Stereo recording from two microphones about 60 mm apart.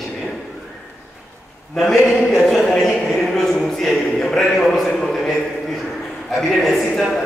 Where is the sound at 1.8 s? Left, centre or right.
Centre.